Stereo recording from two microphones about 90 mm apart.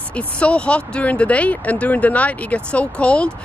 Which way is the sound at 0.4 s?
10° left (ahead or behind).